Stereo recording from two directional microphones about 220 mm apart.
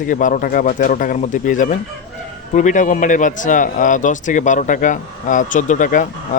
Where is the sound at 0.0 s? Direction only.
35° left (ahead or behind).